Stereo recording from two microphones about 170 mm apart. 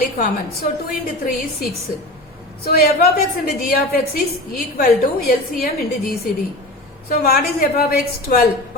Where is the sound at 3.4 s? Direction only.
65° left (ahead or behind).